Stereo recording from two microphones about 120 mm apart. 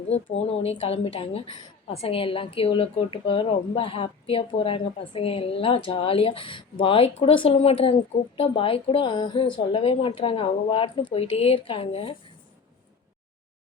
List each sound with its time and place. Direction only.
0.1 s a woman's voice: 55° left (ahead or behind); by 9.5 s 40° left (ahead or behind)
9.7 s a woman's voice: 50° left (ahead or behind)